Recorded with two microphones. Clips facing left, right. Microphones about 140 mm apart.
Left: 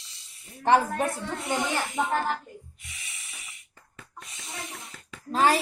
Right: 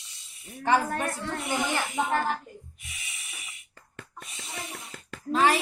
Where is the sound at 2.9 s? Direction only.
25° right (ahead or behind).